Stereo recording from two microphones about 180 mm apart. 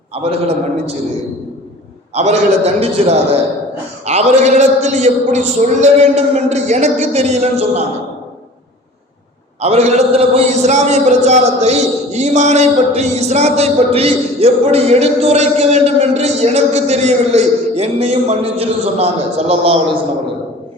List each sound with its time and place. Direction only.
0.1 s a man's voice: 35° right (ahead or behind)
2.1 s a man's voice: 40° right (ahead or behind)
9.6 s a man's voice: 35° right (ahead or behind)